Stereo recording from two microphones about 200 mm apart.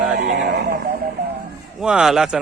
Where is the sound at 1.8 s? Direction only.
5° right (ahead or behind).